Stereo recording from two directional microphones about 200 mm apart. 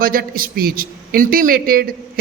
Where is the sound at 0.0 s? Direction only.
45° right (ahead or behind).